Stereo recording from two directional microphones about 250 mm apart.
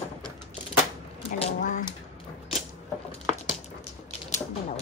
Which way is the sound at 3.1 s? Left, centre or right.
Left.